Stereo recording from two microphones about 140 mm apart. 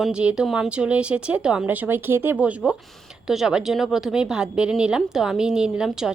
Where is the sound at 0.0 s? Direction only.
5° right (ahead or behind).